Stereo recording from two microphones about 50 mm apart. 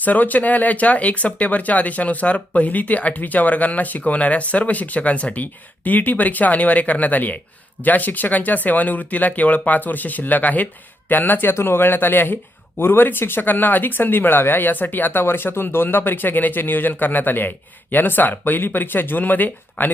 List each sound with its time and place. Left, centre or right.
0.0 s speech: left